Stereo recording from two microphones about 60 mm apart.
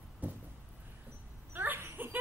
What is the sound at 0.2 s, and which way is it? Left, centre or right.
Vehicle, right.